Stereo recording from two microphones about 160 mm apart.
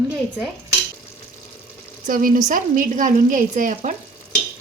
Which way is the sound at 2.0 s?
60° right (ahead or behind).